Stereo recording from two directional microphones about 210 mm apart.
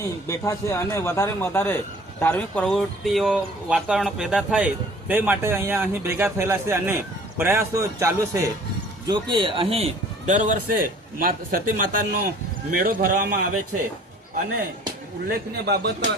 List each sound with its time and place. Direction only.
0.3 s a man's voice: 15° left (ahead or behind); by 13.4 s 40° right (ahead or behind)
15.3 s a man's voice: 50° right (ahead or behind)